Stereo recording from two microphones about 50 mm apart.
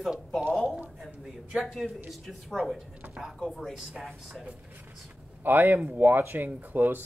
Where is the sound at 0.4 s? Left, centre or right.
Centre.